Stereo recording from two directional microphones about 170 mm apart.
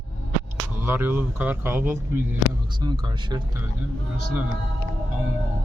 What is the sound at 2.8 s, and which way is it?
Speech, 25° right (ahead or behind).